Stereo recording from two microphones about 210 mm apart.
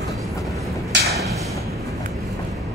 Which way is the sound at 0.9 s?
55° right (ahead or behind).